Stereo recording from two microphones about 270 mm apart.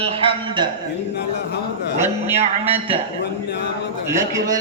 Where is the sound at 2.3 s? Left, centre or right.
Right.